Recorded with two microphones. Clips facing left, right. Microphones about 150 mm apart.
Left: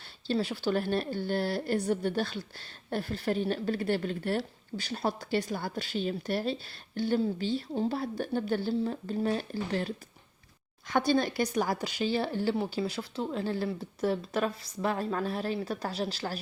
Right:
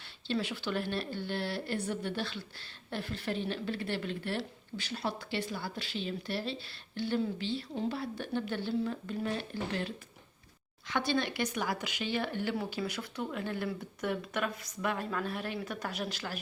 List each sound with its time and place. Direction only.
0.3 s a woman's voice: 35° left (ahead or behind)